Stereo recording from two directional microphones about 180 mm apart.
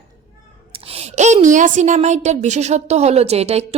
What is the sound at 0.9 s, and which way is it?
A woman's voice, 35° right (ahead or behind).